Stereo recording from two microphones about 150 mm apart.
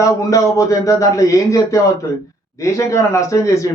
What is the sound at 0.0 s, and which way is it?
Speech, 20° left (ahead or behind).